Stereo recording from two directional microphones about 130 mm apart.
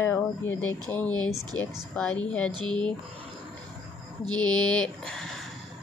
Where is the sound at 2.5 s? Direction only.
35° right (ahead or behind).